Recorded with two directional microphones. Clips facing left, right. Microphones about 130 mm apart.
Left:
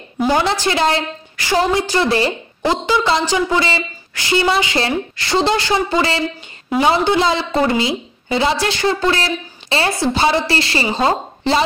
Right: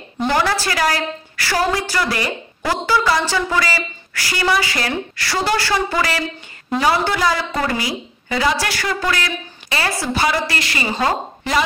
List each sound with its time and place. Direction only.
0.3 s a woman's voice: 20° left (ahead or behind)